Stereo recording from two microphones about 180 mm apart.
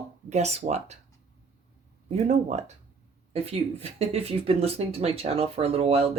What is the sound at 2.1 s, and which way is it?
Speech, 40° right (ahead or behind).